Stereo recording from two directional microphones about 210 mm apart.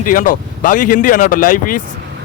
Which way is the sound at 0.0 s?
40° left (ahead or behind).